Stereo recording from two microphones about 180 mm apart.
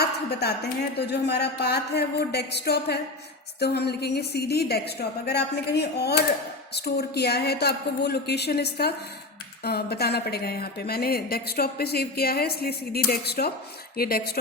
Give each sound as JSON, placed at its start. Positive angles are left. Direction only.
{"t": 0.0, "sound": "speech", "side_deg": 65}